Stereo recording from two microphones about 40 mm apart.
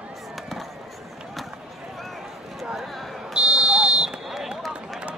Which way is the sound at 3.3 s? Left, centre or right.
Right.